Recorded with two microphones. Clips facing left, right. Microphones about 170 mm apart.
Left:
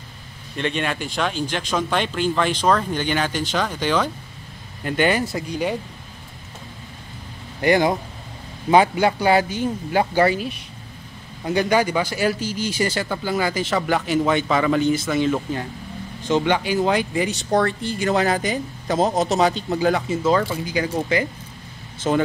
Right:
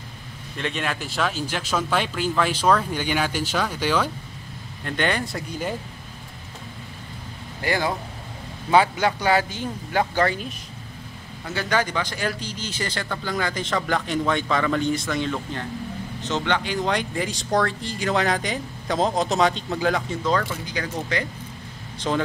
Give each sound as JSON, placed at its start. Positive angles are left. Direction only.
{"t": 0.6, "sound": "speech", "side_deg": 0}
{"t": 4.8, "sound": "speech", "side_deg": 5}
{"t": 7.6, "sound": "speech", "side_deg": 20}
{"t": 11.5, "sound": "speech", "side_deg": 10}